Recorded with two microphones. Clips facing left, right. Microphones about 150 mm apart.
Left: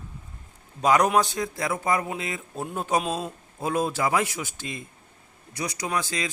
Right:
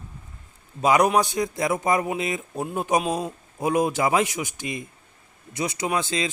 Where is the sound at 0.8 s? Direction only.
10° right (ahead or behind).